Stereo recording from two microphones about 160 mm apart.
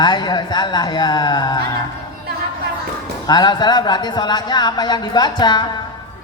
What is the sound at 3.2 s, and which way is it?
A man's voice, 25° left (ahead or behind).